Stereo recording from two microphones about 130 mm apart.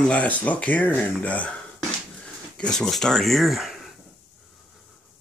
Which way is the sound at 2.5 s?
5° left (ahead or behind).